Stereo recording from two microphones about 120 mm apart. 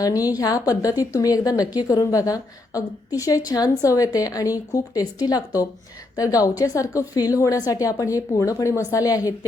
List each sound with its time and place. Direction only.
0.0 s a woman's voice: 30° left (ahead or behind)